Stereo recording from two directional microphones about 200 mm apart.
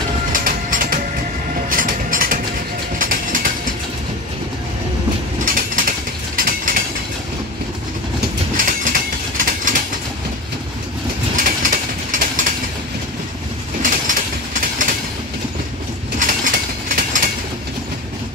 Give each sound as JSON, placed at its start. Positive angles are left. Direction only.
{"t": 0.3, "sound": "train", "side_deg": -45}
{"t": 5.4, "sound": "train", "side_deg": -45}
{"t": 8.5, "sound": "train", "side_deg": -40}
{"t": 11.3, "sound": "train", "side_deg": -40}
{"t": 13.8, "sound": "train", "side_deg": -40}
{"t": 16.2, "sound": "train", "side_deg": -45}